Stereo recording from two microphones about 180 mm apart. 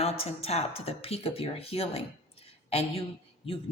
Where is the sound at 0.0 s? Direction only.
35° left (ahead or behind).